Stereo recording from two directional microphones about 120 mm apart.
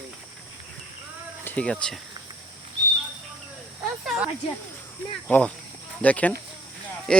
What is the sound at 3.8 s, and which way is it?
Snake, 5° right (ahead or behind).